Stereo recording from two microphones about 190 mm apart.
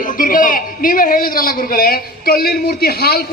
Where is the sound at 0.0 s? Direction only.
45° left (ahead or behind).